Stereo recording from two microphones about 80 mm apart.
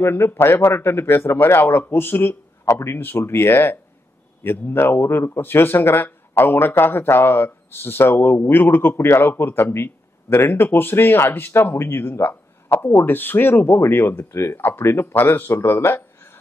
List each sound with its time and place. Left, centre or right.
0.0 s a man's voice: left
2.7 s a man's voice: left